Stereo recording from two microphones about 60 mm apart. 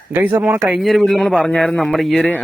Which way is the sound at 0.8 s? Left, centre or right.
Centre.